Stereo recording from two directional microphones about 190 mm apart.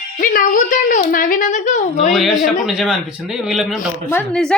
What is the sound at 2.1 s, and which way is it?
A woman's voice, centre (ahead or behind).